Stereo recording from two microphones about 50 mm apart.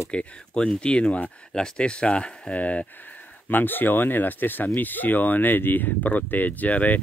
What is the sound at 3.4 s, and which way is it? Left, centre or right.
Speech, left.